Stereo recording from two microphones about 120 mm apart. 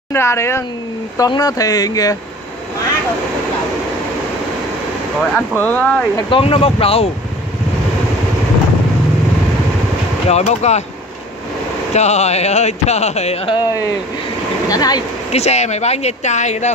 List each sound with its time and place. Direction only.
0.1 s speech: 20° left (ahead or behind)
5.3 s speech: 15° left (ahead or behind)
6.3 s speech: 55° left (ahead or behind)
10.2 s speech: 65° left (ahead or behind)
11.9 s speech: 70° left (ahead or behind)
14.7 s speech: 35° left (ahead or behind)
15.3 s speech: 65° left (ahead or behind)